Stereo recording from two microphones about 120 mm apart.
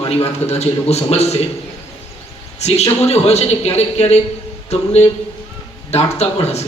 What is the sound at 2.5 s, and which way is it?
A man's voice, 65° left (ahead or behind).